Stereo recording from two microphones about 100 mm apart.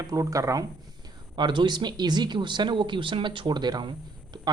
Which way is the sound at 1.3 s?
50° right (ahead or behind).